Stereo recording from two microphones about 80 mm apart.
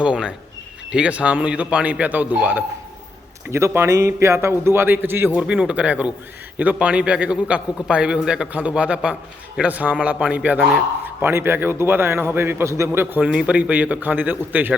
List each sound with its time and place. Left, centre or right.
0.0 s a man's voice: centre
3.5 s a man's voice: right
5.4 s a man's voice: centre
11.0 s a man's voice: right